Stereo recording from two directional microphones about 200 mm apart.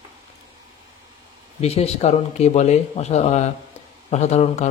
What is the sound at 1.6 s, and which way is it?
Speech, 30° left (ahead or behind).